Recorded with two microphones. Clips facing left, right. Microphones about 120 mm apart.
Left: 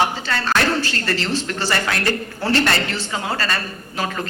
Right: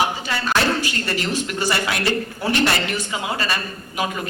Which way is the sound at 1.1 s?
15° right (ahead or behind).